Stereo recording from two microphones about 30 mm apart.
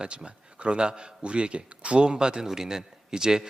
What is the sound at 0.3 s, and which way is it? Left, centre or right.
A man's voice, right.